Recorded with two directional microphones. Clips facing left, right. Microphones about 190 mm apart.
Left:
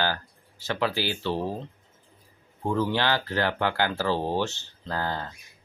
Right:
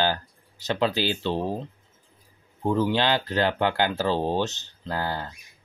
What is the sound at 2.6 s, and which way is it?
Speech, 15° right (ahead or behind).